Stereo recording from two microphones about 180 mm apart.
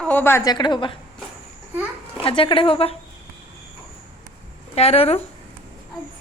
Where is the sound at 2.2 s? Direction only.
30° left (ahead or behind).